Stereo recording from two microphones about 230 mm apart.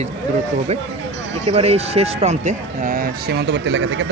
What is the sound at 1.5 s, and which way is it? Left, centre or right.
Speech, right.